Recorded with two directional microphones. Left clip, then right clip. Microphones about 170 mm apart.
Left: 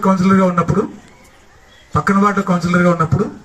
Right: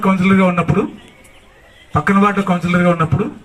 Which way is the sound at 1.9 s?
35° right (ahead or behind).